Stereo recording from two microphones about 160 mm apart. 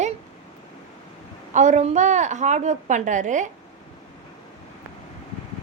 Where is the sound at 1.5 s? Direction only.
45° right (ahead or behind).